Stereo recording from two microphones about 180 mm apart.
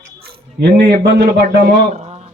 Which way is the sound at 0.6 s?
65° right (ahead or behind).